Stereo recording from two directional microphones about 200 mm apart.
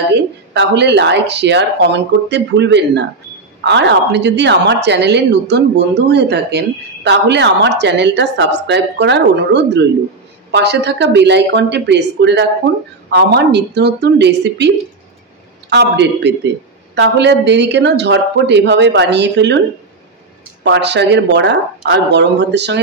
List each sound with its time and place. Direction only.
0.6 s speech: 60° right (ahead or behind)
15.7 s speech: 60° right (ahead or behind)
20.6 s speech: 60° right (ahead or behind)